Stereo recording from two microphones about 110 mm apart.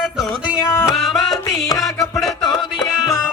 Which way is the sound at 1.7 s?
30° left (ahead or behind).